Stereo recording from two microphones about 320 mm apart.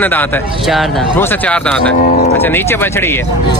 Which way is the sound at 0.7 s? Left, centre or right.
Centre.